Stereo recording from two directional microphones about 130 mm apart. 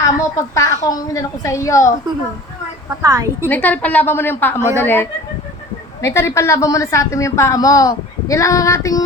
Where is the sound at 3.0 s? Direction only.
25° right (ahead or behind).